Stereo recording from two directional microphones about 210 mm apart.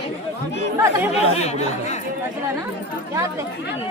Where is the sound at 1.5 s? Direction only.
30° left (ahead or behind).